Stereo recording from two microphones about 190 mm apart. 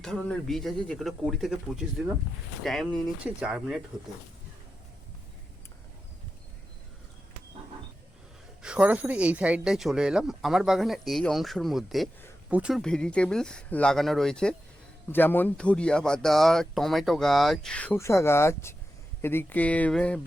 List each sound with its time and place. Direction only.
0.0 s speech: 5° left (ahead or behind)
8.6 s speech: 5° right (ahead or behind)